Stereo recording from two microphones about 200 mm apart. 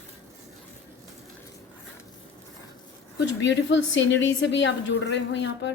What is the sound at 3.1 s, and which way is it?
Speech, 60° left (ahead or behind).